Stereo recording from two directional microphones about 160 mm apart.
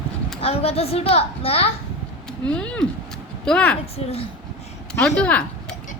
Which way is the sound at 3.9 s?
40° left (ahead or behind).